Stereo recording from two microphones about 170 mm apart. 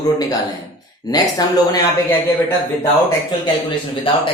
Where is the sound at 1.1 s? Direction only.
25° left (ahead or behind).